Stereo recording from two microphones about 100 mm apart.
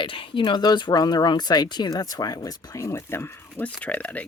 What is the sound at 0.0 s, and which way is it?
Speech, 60° left (ahead or behind).